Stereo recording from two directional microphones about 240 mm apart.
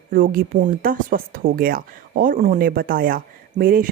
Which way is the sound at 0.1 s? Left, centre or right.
Right.